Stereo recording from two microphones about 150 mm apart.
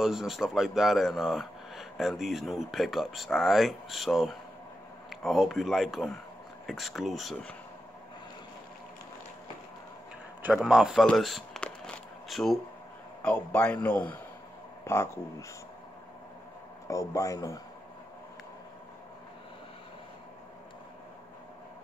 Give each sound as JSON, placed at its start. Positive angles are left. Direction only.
{"t": 0.0, "sound": "speech", "side_deg": 0}
{"t": 10.4, "sound": "a sound", "side_deg": -5}
{"t": 13.2, "sound": "a man's voice", "side_deg": 5}
{"t": 16.8, "sound": "speech", "side_deg": 20}